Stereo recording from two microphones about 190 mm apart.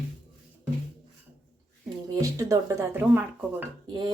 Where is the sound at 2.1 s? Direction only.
20° right (ahead or behind).